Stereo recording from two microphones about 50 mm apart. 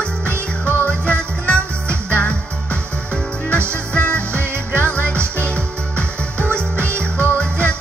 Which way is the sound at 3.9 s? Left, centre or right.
Left.